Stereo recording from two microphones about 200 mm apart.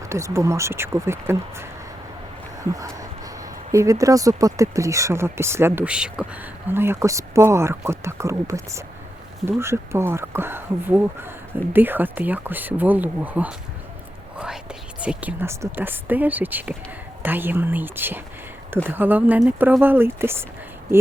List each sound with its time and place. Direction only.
0.1 s speech: 15° right (ahead or behind)
2.7 s a sound: 15° right (ahead or behind)
3.7 s speech: 15° right (ahead or behind)
14.3 s whispering: 5° right (ahead or behind)
15.0 s speech: 5° right (ahead or behind)